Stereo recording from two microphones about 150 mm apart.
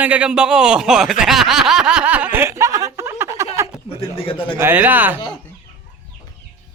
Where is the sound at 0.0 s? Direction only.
10° right (ahead or behind).